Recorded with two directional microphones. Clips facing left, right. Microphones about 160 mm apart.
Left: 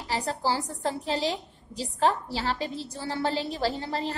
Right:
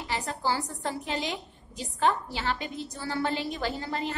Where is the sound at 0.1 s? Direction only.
35° left (ahead or behind).